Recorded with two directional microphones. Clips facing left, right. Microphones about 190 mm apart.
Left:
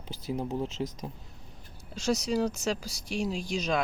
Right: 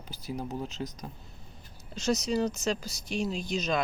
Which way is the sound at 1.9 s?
10° left (ahead or behind).